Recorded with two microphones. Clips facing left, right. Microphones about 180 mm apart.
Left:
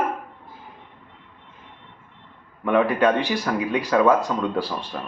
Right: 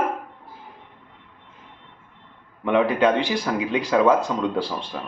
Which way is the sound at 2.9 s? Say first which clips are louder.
Even; 20° right (ahead or behind).